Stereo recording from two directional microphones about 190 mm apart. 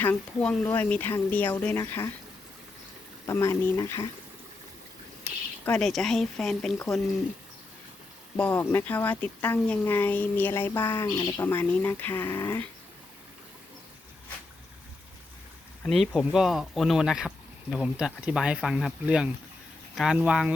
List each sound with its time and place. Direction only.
0.0 s speech: 10° left (ahead or behind)
3.2 s speech: 15° left (ahead or behind)
5.2 s speech: 10° left (ahead or behind)
8.4 s speech: 10° left (ahead or behind)
15.8 s speech: centre (ahead or behind)